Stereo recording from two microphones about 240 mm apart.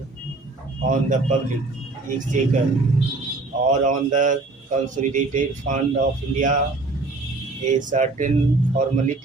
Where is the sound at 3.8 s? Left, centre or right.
Right.